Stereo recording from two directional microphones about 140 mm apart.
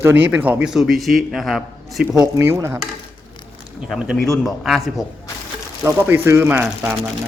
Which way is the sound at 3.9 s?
Centre (ahead or behind).